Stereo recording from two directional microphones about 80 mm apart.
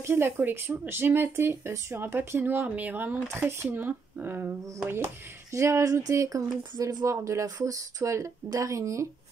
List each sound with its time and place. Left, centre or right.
0.0 s speech: right
5.5 s speech: right